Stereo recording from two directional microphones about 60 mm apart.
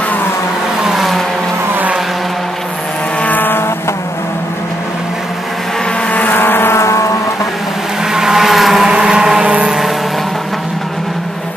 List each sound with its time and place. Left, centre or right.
0.8 s vehicle: centre
3.2 s vehicle: left
6.1 s vehicle: left
8.1 s vehicle: centre
8.9 s a sound: centre